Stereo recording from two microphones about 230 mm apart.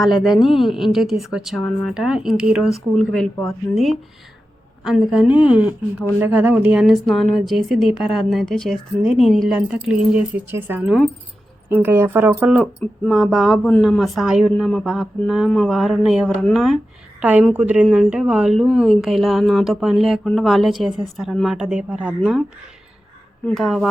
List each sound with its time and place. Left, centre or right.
0.0 s speech: centre
4.8 s speech: centre
23.5 s speech: centre